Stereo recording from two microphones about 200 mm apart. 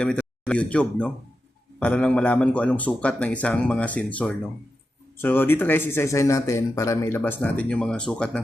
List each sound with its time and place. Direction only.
0.0 s speech: 5° left (ahead or behind)